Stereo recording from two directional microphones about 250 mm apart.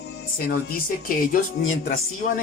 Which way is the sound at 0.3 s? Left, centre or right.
Left.